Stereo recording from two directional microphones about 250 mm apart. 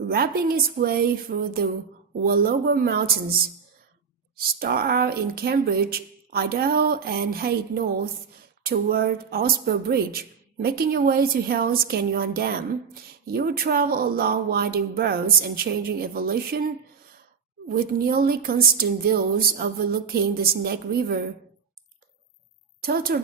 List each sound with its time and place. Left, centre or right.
0.1 s speech: right
4.6 s speech: right
22.8 s speech: right